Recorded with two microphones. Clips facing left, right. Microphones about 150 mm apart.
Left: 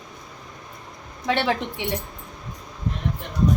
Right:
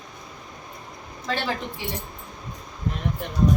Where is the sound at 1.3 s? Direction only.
70° left (ahead or behind).